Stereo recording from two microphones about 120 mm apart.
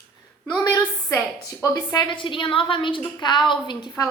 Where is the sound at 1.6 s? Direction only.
30° left (ahead or behind).